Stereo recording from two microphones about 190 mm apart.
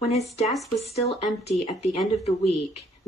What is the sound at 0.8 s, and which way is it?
Speech, 35° left (ahead or behind).